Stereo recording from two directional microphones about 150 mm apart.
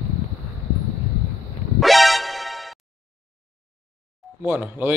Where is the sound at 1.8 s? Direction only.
Centre (ahead or behind).